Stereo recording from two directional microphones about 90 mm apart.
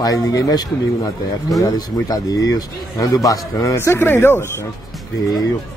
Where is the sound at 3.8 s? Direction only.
25° left (ahead or behind).